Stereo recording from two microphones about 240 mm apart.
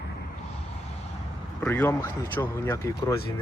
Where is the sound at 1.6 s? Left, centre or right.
Centre.